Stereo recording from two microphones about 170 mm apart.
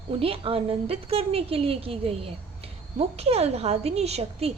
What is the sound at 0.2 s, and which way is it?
A woman's voice, 35° right (ahead or behind).